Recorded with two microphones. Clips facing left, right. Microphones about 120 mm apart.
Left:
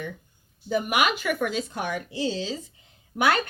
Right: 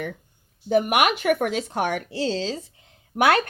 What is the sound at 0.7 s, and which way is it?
Speech, 65° right (ahead or behind).